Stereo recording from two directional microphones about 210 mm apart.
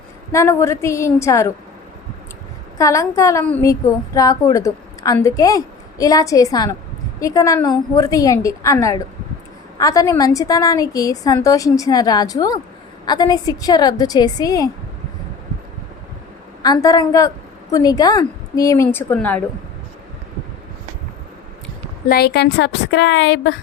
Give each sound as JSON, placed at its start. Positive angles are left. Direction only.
{"t": 0.3, "sound": "a woman's voice", "side_deg": 15}
{"t": 2.7, "sound": "a woman's voice", "side_deg": 15}
{"t": 16.6, "sound": "a woman's voice", "side_deg": 15}
{"t": 22.1, "sound": "a woman's voice", "side_deg": 50}